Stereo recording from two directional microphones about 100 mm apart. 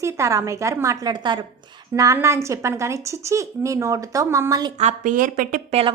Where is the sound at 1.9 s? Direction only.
35° right (ahead or behind).